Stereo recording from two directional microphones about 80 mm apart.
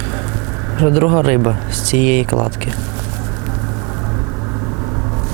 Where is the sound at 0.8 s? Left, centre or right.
Centre.